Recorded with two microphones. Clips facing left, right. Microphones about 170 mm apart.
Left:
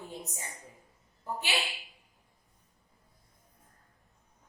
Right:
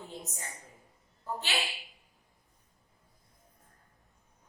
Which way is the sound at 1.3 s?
15° left (ahead or behind).